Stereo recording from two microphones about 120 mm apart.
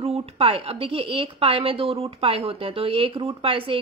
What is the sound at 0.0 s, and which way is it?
Speech, 55° right (ahead or behind).